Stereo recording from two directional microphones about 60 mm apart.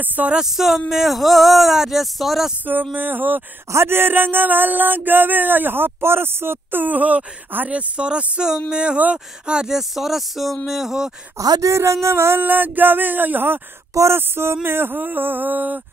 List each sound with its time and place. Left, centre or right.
0.0 s speech: right
0.3 s speech: centre
2.6 s a sound: right
8.6 s speech: centre
11.3 s speech: right
11.7 s a sound: right